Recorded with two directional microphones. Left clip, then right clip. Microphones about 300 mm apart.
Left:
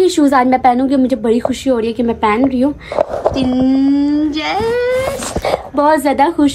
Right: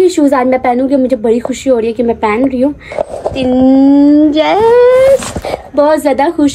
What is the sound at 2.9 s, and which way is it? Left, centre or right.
Speech, right.